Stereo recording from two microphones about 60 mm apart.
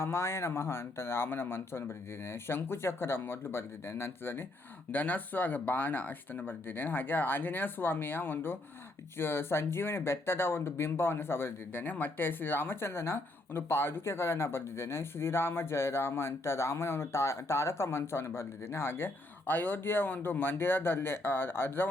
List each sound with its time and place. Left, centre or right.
0.0 s speech: left